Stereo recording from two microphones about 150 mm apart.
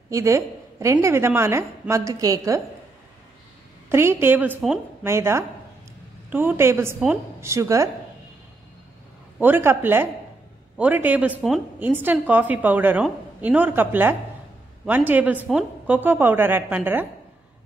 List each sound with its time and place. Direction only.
0.1 s a woman's voice: 20° right (ahead or behind)
3.9 s a woman's voice: 15° right (ahead or behind)
9.4 s a woman's voice: 15° right (ahead or behind)